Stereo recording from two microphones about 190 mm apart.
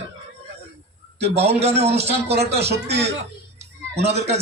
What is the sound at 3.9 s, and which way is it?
Speech, 35° right (ahead or behind).